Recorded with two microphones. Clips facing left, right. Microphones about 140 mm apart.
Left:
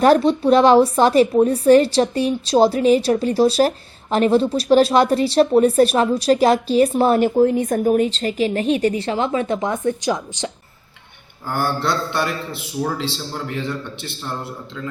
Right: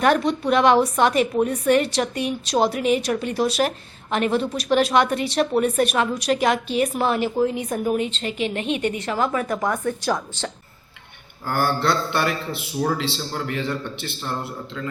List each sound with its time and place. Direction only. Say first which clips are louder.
0.0 s speech: left 5 dB; 30° left (ahead or behind); by 10.5 s 15° left (ahead or behind)
11.4 s speech: even; 10° right (ahead or behind)